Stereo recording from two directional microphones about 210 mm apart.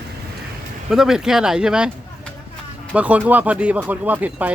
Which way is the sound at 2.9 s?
5° right (ahead or behind).